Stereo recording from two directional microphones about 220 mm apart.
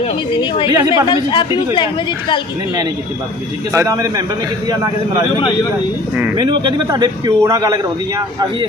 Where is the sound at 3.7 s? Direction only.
15° right (ahead or behind).